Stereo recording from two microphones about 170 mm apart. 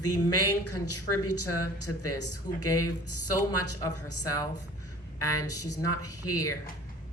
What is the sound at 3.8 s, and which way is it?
A woman's voice, 20° left (ahead or behind).